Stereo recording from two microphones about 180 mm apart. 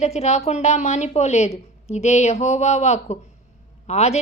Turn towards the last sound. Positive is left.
turn(degrees=35)  # may be behind; listen again after turning